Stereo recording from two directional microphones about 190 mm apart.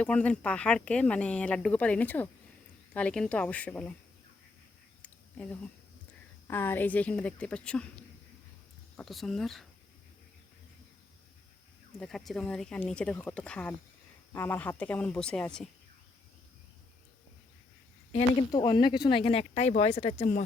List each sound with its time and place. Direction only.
0.0 s speech: 5° left (ahead or behind)
5.0 s a sound: 5° left (ahead or behind)
6.5 s speech: 10° left (ahead or behind)
9.0 s speech: centre (ahead or behind)
11.9 s speech: centre (ahead or behind)
18.5 s speech: 25° left (ahead or behind)